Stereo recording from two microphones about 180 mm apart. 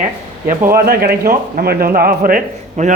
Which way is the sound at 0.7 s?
55° right (ahead or behind).